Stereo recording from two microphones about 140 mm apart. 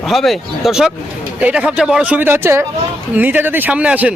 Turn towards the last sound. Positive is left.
turn(degrees=-10)  # may be behind; listen again after turning